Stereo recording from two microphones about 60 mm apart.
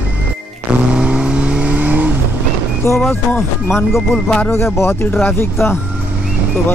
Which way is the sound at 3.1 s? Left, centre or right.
Left.